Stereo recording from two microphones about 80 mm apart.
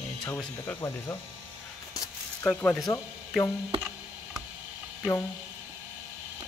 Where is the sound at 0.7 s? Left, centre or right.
Left.